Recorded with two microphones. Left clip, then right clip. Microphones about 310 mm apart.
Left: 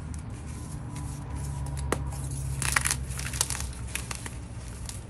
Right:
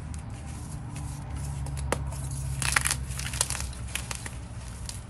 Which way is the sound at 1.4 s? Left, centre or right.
Centre.